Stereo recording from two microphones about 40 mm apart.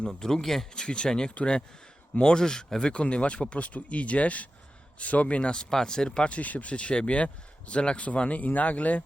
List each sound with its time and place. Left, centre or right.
0.2 s speech: centre
2.9 s speech: left
5.5 s speech: centre
6.3 s speech: left